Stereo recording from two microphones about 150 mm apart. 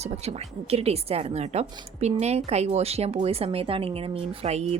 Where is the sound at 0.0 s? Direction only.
45° right (ahead or behind).